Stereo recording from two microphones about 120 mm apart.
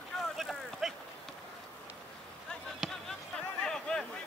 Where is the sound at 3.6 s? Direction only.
5° left (ahead or behind).